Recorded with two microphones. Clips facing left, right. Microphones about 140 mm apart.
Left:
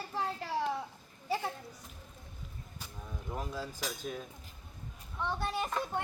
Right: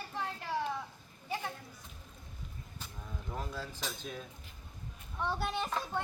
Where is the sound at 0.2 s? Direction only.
35° left (ahead or behind).